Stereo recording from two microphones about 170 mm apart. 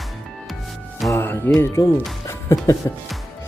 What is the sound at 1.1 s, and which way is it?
Music, 15° left (ahead or behind).